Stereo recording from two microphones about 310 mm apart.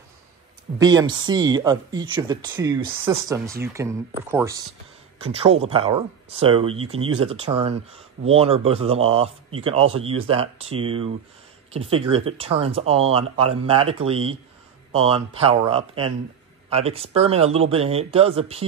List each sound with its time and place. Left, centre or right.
0.7 s speech: centre
14.9 s speech: centre